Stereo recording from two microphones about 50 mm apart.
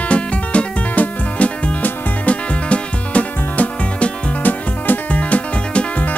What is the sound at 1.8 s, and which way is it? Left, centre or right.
Music, left.